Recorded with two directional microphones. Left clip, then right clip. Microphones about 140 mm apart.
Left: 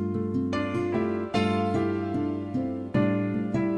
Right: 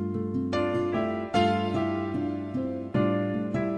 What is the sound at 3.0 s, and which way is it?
Music, 25° right (ahead or behind).